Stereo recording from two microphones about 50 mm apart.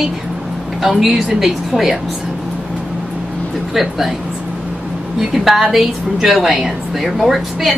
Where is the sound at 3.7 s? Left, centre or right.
Centre.